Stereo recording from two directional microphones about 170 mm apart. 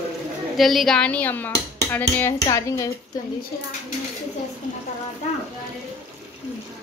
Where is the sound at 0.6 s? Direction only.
Centre (ahead or behind); by 2.9 s 20° left (ahead or behind).